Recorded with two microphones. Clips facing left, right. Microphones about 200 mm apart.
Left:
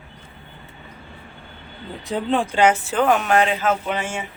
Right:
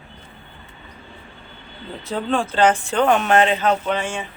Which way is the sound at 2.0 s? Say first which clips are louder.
Left 1 dB; 15° left (ahead or behind).